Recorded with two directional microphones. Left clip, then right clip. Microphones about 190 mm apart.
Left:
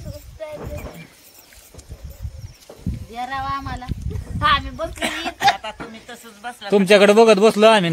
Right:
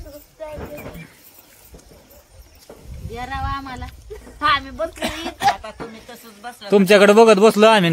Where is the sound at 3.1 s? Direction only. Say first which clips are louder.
Left 1 dB; 50° left (ahead or behind).